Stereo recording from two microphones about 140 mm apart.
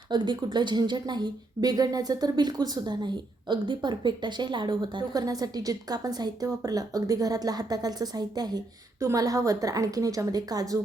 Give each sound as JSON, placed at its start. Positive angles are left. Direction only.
{"t": 0.1, "sound": "a woman's voice", "side_deg": -35}